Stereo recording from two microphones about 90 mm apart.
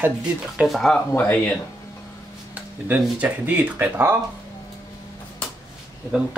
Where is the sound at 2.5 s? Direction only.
15° right (ahead or behind).